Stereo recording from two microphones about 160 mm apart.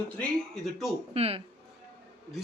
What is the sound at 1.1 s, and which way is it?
Speech, 40° right (ahead or behind).